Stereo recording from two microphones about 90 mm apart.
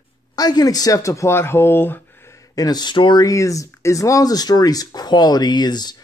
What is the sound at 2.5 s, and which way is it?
Speech, 50° left (ahead or behind).